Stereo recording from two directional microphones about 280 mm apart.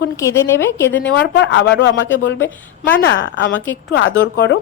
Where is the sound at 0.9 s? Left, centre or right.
Left.